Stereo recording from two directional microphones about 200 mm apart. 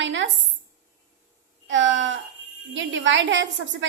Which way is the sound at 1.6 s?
70° right (ahead or behind).